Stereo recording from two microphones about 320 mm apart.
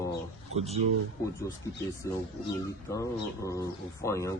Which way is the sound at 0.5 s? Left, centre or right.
Centre.